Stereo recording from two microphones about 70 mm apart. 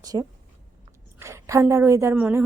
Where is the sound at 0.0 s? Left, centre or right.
Right.